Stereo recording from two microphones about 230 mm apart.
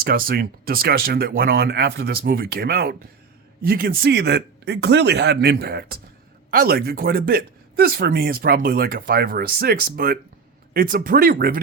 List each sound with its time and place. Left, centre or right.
0.0 s speech: right